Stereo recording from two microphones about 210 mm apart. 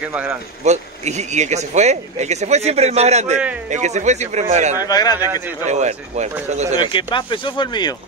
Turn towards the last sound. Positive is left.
turn(degrees=20)  # may be behind; listen again after turning